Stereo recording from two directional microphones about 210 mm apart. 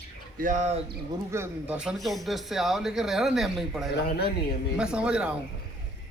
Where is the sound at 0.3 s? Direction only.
40° right (ahead or behind).